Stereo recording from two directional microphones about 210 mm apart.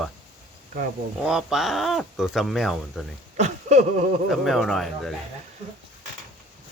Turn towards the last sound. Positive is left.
turn(degrees=0)  # may be behind; listen again after turning